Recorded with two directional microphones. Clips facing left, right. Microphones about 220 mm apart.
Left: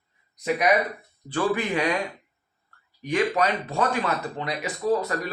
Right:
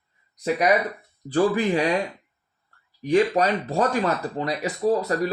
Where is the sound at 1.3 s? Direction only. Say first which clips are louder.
Right 4 dB; 35° right (ahead or behind).